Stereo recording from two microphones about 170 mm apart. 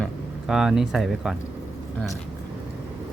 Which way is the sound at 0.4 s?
Centre (ahead or behind).